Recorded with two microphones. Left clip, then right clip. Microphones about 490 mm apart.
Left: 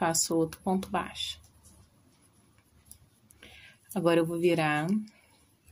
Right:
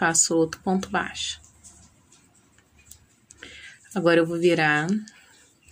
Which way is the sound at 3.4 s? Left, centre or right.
Left.